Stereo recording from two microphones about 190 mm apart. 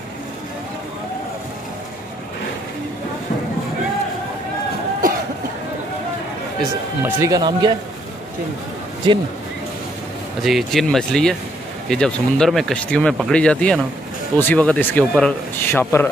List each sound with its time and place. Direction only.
7.0 s speech: 15° right (ahead or behind)
10.4 s speech: centre (ahead or behind)